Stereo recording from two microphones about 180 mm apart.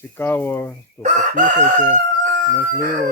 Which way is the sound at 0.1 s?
10° left (ahead or behind).